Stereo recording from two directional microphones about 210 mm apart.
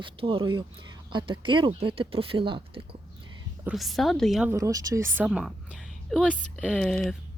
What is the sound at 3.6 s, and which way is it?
Speech, centre (ahead or behind).